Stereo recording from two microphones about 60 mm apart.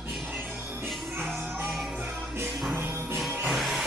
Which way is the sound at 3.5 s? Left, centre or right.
Centre.